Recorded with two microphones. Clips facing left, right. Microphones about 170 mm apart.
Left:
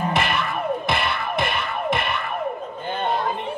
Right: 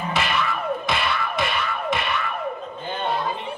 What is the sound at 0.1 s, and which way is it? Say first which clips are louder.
Music: left 1 dB; 55° left (ahead or behind).